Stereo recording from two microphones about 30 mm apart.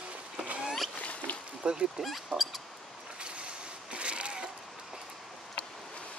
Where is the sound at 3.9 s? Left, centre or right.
Right.